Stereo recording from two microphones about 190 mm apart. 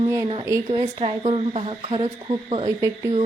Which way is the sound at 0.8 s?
30° right (ahead or behind).